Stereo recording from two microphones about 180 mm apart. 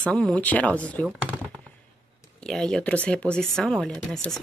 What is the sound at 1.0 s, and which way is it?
Chopping, 5° right (ahead or behind).